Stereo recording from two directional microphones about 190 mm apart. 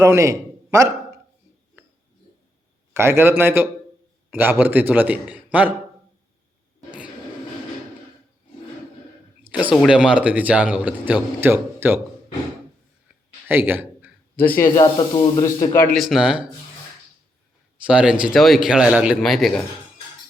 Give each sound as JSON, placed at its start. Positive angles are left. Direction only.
{"t": 0.0, "sound": "a sound", "side_deg": -15}
{"t": 2.9, "sound": "speech", "side_deg": -15}
{"t": 9.4, "sound": "speech", "side_deg": -10}
{"t": 13.5, "sound": "a man's voice", "side_deg": -10}
{"t": 14.5, "sound": "speech", "side_deg": 15}
{"t": 14.9, "sound": "speech", "side_deg": 25}
{"t": 16.0, "sound": "speech", "side_deg": 0}
{"t": 17.8, "sound": "speech", "side_deg": -5}